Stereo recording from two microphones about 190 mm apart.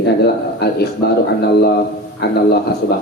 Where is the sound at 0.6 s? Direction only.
55° left (ahead or behind).